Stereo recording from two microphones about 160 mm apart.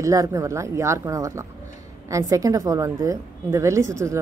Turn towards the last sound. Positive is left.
turn(degrees=-20)  # may be behind; listen again after turning